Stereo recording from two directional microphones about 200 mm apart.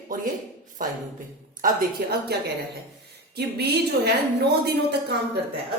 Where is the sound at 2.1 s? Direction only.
55° right (ahead or behind).